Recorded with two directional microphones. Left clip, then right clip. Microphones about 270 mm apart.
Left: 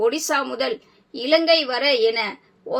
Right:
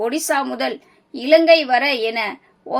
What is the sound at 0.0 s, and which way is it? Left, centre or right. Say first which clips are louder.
A woman's voice: right 1 dB; right.